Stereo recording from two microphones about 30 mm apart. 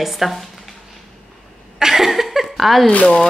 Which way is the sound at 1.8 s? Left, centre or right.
Centre.